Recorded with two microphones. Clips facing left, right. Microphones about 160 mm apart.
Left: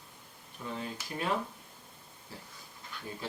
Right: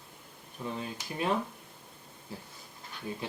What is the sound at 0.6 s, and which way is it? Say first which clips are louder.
Speech: right 3 dB; 15° right (ahead or behind).